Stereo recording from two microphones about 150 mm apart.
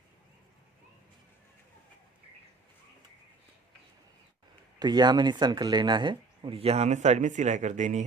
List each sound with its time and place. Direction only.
4.8 s speech: 30° right (ahead or behind); by 8.0 s 55° right (ahead or behind)